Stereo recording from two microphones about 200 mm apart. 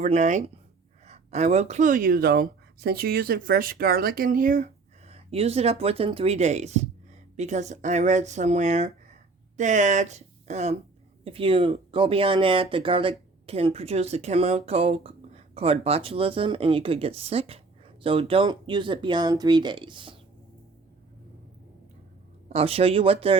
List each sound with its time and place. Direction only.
0.0 s speech: 35° right (ahead or behind)
22.4 s speech: 30° right (ahead or behind)